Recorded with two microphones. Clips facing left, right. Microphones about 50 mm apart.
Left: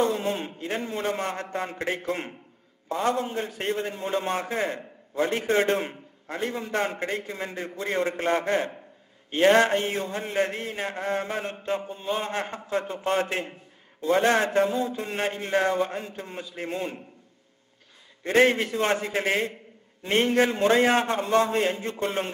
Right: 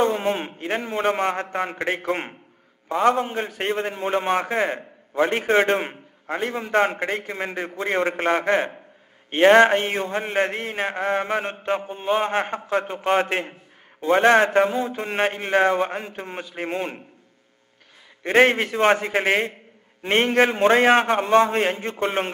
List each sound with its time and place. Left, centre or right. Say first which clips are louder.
0.0 s a man's voice: right 4 dB; right
18.2 s a man's voice: right 3 dB; right